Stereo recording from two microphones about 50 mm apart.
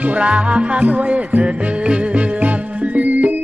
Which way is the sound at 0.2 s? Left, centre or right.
Right.